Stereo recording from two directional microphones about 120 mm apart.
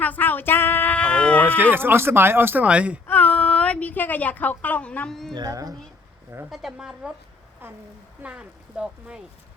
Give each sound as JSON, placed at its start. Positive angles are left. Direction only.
{"t": 0.0, "sound": "bleat", "side_deg": 15}
{"t": 1.7, "sound": "speech", "side_deg": -20}
{"t": 3.1, "sound": "a woman's voice", "side_deg": 15}
{"t": 5.3, "sound": "speech", "side_deg": -30}
{"t": 6.5, "sound": "speech", "side_deg": -5}
{"t": 7.6, "sound": "speech", "side_deg": -15}